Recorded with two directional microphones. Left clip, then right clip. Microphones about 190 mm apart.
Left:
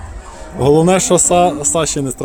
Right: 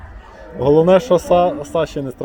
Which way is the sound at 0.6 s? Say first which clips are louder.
Even; 25° left (ahead or behind).